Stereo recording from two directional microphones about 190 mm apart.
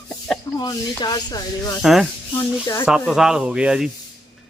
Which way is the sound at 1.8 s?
Centre (ahead or behind).